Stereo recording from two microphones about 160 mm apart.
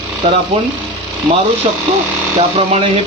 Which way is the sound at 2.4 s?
40° right (ahead or behind).